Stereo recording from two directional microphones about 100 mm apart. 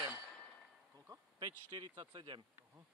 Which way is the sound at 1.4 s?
50° right (ahead or behind).